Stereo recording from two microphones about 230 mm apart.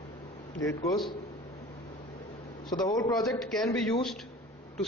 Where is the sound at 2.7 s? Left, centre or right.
Centre.